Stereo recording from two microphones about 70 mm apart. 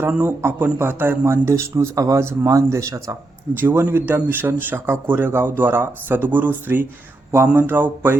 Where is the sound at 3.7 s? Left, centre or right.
Right.